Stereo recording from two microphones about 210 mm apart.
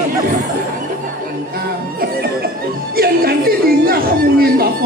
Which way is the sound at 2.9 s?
45° right (ahead or behind).